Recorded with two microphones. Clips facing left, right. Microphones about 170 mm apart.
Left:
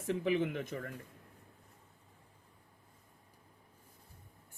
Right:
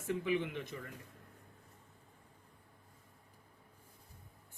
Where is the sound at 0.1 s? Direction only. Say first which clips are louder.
Left 3 dB; 40° left (ahead or behind).